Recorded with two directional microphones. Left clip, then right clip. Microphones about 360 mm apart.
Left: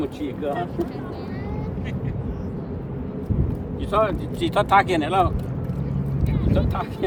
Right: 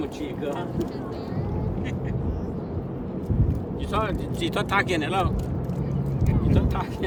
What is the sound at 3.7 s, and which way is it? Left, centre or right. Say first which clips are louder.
Speech: left 7 dB; centre.